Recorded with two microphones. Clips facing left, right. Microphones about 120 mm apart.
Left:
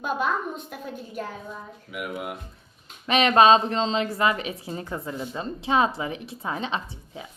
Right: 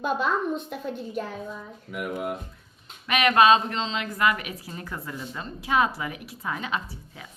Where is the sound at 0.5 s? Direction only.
Centre (ahead or behind).